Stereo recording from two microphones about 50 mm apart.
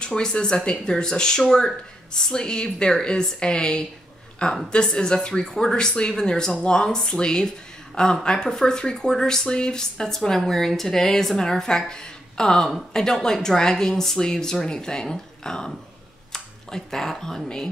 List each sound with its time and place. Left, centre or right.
0.0 s speech: centre